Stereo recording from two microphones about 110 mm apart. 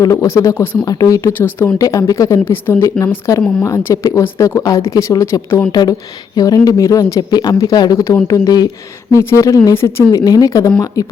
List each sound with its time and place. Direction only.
0.0 s speech: 30° left (ahead or behind)
0.9 s a woman's voice: 35° left (ahead or behind)
1.4 s speech: 20° left (ahead or behind)
1.8 s a woman's voice: 30° left (ahead or behind)
2.4 s speech: 20° left (ahead or behind)
5.7 s a woman's voice: 35° left (ahead or behind)